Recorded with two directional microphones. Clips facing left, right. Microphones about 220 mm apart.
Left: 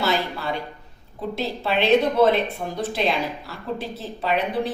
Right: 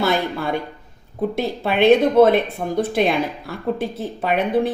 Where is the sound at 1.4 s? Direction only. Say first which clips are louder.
Right 5 dB; 55° right (ahead or behind).